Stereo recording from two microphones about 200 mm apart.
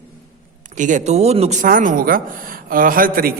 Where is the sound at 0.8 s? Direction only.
40° right (ahead or behind).